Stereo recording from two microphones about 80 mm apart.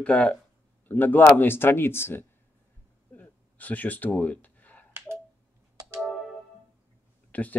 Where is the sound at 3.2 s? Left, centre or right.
Centre.